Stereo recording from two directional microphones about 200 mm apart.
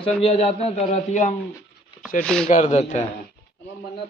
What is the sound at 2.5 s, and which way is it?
Speech, 35° left (ahead or behind).